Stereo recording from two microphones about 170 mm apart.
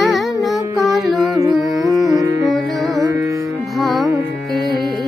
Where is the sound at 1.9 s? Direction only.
20° right (ahead or behind).